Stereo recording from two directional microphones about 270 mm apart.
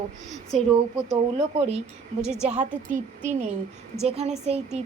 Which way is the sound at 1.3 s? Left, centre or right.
Right.